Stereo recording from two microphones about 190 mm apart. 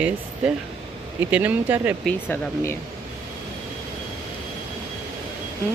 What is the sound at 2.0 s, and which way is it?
Speech, 5° left (ahead or behind).